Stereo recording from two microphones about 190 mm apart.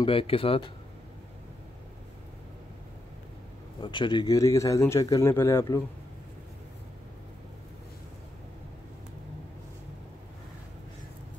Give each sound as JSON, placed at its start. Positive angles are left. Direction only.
{"t": 0.0, "sound": "speech", "side_deg": 30}
{"t": 3.8, "sound": "speech", "side_deg": 25}